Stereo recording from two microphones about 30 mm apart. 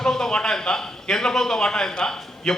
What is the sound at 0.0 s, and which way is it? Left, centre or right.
A man's voice, centre.